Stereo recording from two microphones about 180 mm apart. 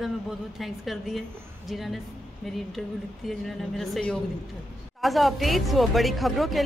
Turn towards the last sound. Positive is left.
turn(degrees=0)  # may be behind; listen again after turning